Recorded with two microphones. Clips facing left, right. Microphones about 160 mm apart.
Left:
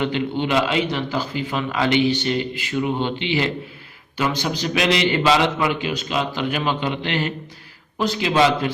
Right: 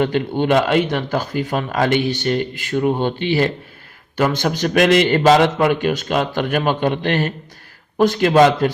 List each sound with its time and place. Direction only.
0.0 s speech: 45° right (ahead or behind)